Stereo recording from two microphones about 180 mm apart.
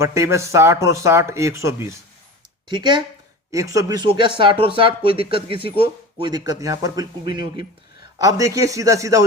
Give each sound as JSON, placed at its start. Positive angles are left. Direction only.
{"t": 0.0, "sound": "speech", "side_deg": -15}
{"t": 6.5, "sound": "speech", "side_deg": -20}